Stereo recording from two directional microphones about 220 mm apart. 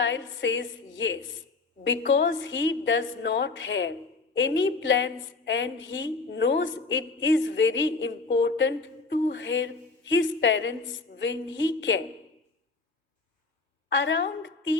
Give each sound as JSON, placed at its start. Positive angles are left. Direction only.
{"t": 0.0, "sound": "a woman's voice", "side_deg": 55}
{"t": 13.9, "sound": "a woman's voice", "side_deg": 55}